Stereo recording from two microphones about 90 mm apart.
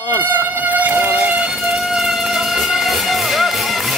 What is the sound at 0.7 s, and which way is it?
Insect, 20° right (ahead or behind).